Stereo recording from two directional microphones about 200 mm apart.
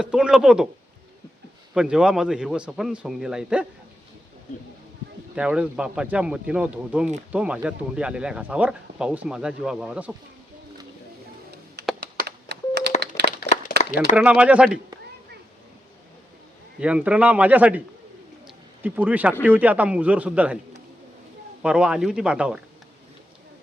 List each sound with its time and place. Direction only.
0.0 s speech: 5° right (ahead or behind)
1.7 s speech: 5° right (ahead or behind)
5.3 s speech: 5° right (ahead or behind)
11.8 s computer keyboard: 55° right (ahead or behind)
13.1 s a sound: 15° left (ahead or behind)
13.7 s a sound: 45° left (ahead or behind)
14.2 s speech: 5° right (ahead or behind)
16.8 s a man's voice: 5° right (ahead or behind)
18.4 s a sound: 10° right (ahead or behind)
19.4 s a man's voice: 10° right (ahead or behind)
21.6 s speech: 5° right (ahead or behind)